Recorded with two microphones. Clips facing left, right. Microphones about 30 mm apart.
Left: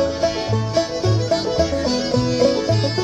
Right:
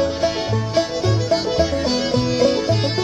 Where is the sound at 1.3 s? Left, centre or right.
Right.